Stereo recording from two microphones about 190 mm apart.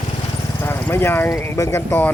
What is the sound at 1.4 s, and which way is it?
Speech, 15° left (ahead or behind).